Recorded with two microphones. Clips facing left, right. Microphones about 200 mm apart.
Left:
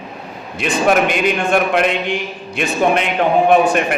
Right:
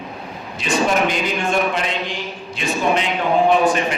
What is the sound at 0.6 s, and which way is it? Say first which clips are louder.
A man's voice: left 3 dB; 60° left (ahead or behind).